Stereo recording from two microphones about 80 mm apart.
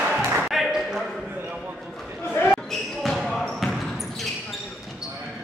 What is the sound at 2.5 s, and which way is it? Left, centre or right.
Basketball bounce, centre.